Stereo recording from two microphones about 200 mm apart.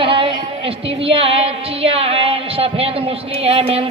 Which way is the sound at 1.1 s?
30° right (ahead or behind).